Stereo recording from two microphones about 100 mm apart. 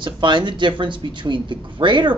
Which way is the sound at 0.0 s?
55° right (ahead or behind).